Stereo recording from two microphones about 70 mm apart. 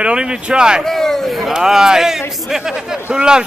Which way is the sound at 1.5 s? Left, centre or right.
Centre.